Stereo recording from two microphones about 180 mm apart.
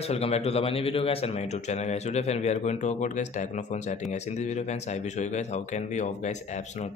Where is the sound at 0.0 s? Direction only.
35° left (ahead or behind).